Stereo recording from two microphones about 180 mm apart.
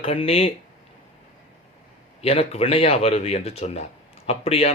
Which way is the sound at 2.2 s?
35° left (ahead or behind).